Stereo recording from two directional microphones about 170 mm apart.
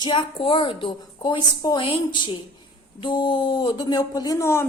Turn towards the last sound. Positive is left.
turn(degrees=15)  # may be behind; listen again after turning